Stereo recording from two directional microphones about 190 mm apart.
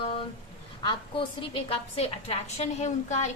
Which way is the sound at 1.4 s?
30° left (ahead or behind).